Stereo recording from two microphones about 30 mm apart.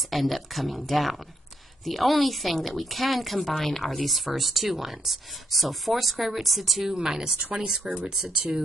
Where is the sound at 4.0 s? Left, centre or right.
Centre.